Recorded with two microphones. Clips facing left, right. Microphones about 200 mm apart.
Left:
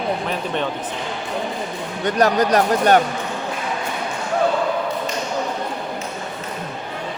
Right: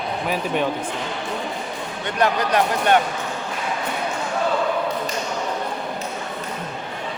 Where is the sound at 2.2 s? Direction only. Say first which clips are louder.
Left 3 dB; 40° left (ahead or behind).